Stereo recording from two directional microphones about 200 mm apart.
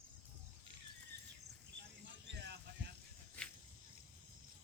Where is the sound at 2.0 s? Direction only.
60° right (ahead or behind).